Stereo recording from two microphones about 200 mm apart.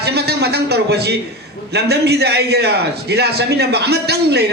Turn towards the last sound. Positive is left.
turn(degrees=-55)  # may be behind; listen again after turning